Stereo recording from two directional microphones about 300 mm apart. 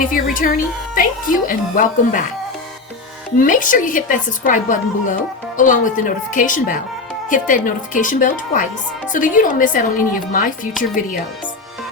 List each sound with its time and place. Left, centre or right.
0.0 s a woman's voice: left
3.3 s a woman's voice: left